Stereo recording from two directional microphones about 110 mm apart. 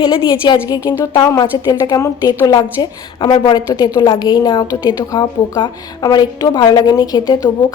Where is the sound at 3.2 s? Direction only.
55° left (ahead or behind).